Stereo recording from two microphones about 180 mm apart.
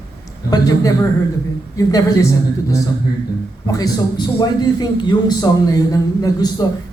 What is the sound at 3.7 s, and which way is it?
Speech, 20° left (ahead or behind).